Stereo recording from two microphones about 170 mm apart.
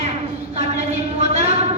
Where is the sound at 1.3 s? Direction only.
40° right (ahead or behind).